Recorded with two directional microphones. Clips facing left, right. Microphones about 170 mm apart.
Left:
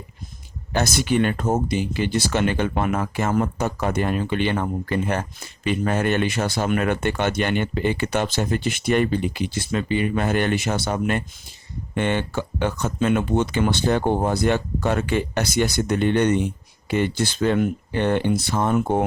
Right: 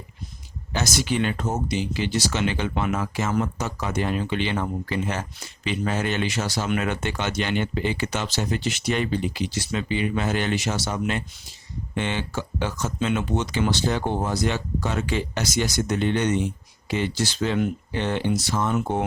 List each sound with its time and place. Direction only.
0.7 s speech: 55° left (ahead or behind)